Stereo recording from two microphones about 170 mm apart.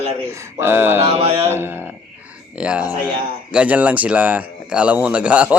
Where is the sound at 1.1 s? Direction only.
35° right (ahead or behind).